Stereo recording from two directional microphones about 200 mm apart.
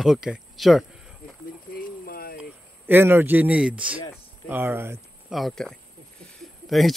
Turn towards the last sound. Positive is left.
turn(degrees=0)  # may be behind; listen again after turning